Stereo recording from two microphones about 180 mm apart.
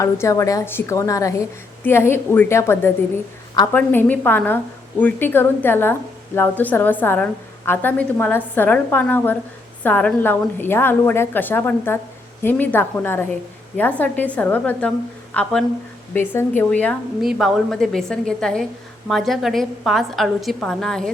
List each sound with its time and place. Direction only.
0.0 s a woman's voice: 15° left (ahead or behind)